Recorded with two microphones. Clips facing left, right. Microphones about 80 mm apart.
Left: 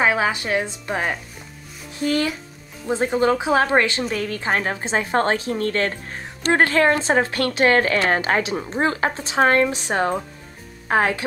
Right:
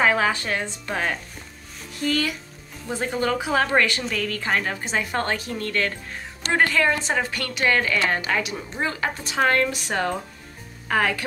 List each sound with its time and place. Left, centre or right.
0.0 s a woman's voice: centre; by 11.2 s left